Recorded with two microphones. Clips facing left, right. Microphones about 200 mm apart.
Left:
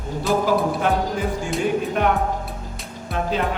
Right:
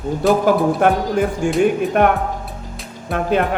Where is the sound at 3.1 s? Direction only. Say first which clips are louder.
Right 6 dB; 60° right (ahead or behind).